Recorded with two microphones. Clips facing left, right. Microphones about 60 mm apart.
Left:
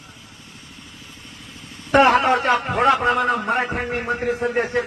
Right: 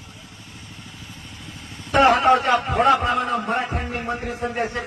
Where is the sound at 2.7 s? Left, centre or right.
Left.